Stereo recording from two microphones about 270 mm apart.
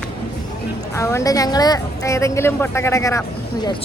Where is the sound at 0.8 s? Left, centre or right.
Centre.